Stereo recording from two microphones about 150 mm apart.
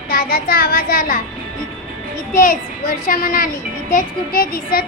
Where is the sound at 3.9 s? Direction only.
75° left (ahead or behind).